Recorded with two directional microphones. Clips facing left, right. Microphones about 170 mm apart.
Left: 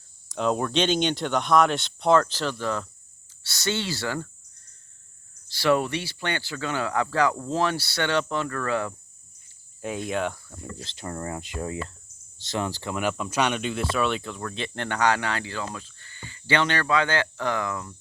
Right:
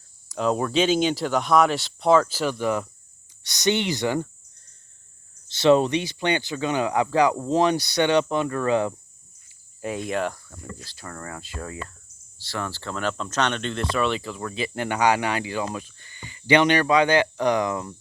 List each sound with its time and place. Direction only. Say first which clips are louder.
0.3 s speech: right 1 dB; centre (ahead or behind); by 4.3 s 20° right (ahead or behind)
5.5 s speech: right 5 dB; 20° right (ahead or behind)
9.8 s speech: right 1 dB; centre (ahead or behind)
10.8 s speech: left 7 dB; 20° left (ahead or behind); by 17.9 s 20° right (ahead or behind)